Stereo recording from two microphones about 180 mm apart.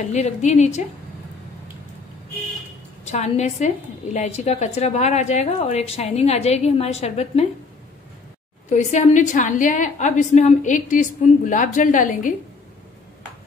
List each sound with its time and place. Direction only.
0.1 s a woman's voice: 40° left (ahead or behind)
3.1 s a woman's voice: 40° left (ahead or behind)
8.6 s a woman's voice: 40° left (ahead or behind)